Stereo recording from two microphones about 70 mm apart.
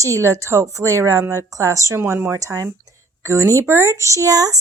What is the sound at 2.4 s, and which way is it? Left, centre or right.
A woman's voice, right.